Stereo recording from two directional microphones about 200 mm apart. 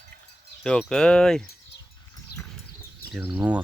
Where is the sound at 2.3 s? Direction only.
50° left (ahead or behind).